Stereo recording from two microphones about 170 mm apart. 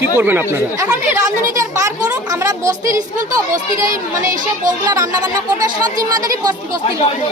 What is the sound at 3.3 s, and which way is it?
Speech, 20° right (ahead or behind).